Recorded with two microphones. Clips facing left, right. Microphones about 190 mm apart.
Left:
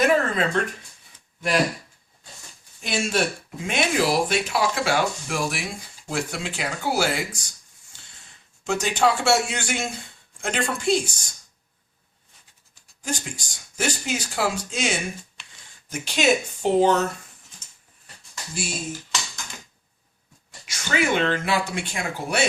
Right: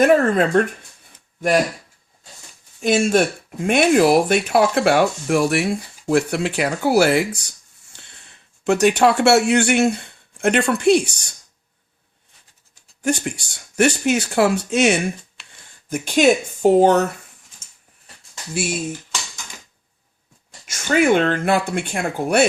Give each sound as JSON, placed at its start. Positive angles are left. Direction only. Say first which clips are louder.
{"t": 0.0, "sound": "speech", "louder": "right 6 dB", "side_deg": -50}
{"t": 2.8, "sound": "speech", "louder": "right 8 dB", "side_deg": -50}
{"t": 8.6, "sound": "speech", "louder": "right 7 dB", "side_deg": -65}
{"t": 13.0, "sound": "speech", "louder": "right 9 dB", "side_deg": -65}
{"t": 15.9, "sound": "speech", "louder": "right 6 dB", "side_deg": -50}
{"t": 20.7, "sound": "speech", "louder": "right 8 dB", "side_deg": -50}